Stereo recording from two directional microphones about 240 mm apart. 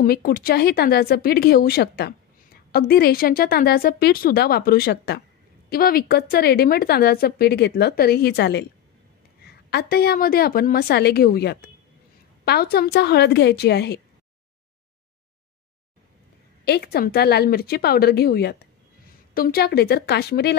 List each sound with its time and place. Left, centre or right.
0.0 s speech: left
9.7 s a woman's voice: left
16.6 s speech: left